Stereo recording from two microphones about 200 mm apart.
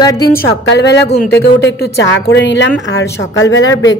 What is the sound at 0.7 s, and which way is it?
Speech, 60° left (ahead or behind).